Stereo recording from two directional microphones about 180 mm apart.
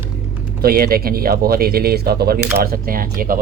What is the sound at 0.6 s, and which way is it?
Speech, 55° right (ahead or behind).